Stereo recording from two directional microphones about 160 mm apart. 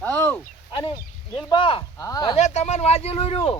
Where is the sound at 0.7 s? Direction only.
35° left (ahead or behind).